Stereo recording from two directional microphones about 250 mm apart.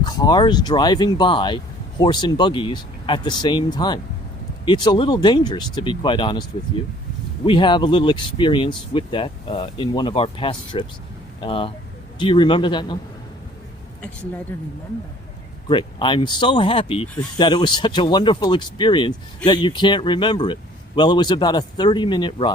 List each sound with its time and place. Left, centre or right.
0.0 s speech: centre
7.4 s speech: centre
14.5 s speech: centre
15.7 s speech: centre